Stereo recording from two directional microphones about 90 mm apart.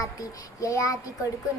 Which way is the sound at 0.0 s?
40° left (ahead or behind).